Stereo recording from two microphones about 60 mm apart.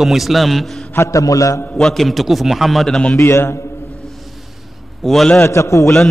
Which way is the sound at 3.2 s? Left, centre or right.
Left.